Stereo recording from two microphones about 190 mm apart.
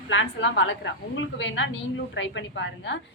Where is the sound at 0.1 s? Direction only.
75° left (ahead or behind).